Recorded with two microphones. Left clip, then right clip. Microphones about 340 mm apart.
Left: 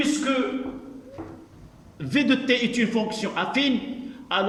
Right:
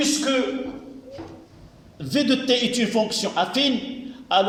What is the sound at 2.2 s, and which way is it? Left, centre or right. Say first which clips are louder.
A man's voice: right 2 dB; right.